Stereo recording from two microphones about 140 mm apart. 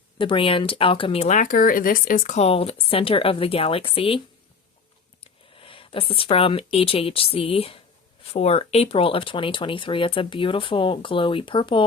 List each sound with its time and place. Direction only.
0.2 s speech: 40° left (ahead or behind)
1.3 s speech: 75° left (ahead or behind); by 4.2 s 40° left (ahead or behind)
5.2 s speech: 40° left (ahead or behind)